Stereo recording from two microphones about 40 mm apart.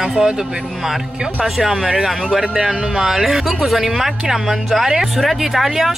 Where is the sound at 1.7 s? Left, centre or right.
Centre.